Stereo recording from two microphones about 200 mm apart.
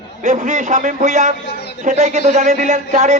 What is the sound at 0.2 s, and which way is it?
Speech, 35° right (ahead or behind).